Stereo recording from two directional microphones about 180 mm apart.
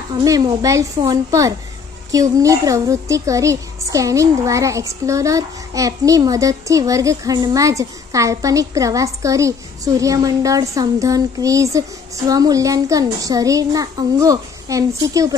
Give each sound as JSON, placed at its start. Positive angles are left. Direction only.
{"t": 0.1, "sound": "a woman's voice", "side_deg": -20}